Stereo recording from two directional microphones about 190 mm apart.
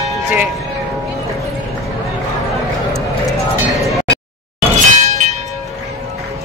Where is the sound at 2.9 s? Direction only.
Centre (ahead or behind).